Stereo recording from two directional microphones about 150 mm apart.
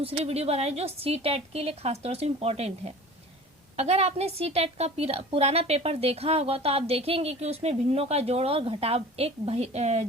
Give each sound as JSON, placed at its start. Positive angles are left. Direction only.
{"t": 0.0, "sound": "a woman's voice", "side_deg": -40}